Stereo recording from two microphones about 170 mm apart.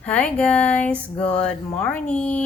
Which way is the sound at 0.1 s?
5° left (ahead or behind).